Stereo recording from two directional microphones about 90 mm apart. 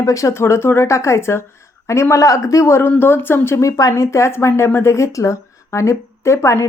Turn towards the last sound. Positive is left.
turn(degrees=30)  # may be behind; listen again after turning